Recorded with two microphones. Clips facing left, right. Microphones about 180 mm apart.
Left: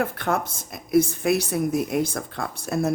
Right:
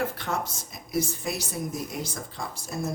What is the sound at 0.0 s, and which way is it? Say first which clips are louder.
Speech: left 5 dB; 55° left (ahead or behind).